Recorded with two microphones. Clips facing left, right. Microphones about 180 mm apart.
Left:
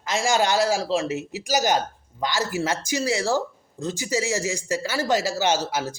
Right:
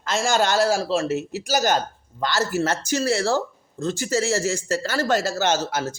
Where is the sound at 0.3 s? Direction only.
15° left (ahead or behind).